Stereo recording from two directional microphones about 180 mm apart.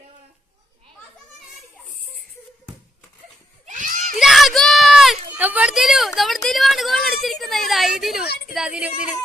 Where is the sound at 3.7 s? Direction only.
45° right (ahead or behind).